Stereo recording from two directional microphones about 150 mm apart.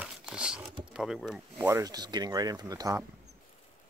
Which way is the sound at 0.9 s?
5° right (ahead or behind).